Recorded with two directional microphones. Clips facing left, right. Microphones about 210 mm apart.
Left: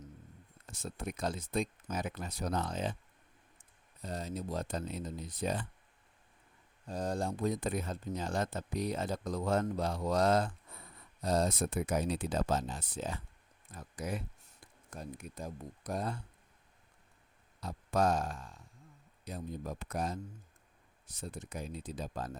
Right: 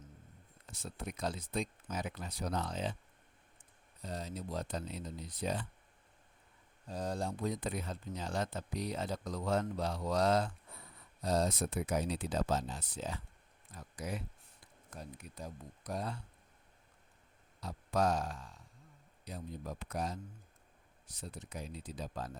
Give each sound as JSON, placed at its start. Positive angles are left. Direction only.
{"t": 0.7, "sound": "speech", "side_deg": 45}
{"t": 6.9, "sound": "speech", "side_deg": 45}
{"t": 15.2, "sound": "speech", "side_deg": 50}
{"t": 17.6, "sound": "speech", "side_deg": 50}
{"t": 21.2, "sound": "speech", "side_deg": 50}